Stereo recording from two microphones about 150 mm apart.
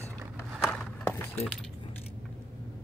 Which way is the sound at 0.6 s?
15° left (ahead or behind).